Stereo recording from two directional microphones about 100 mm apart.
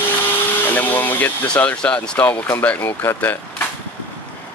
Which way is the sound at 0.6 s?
20° left (ahead or behind).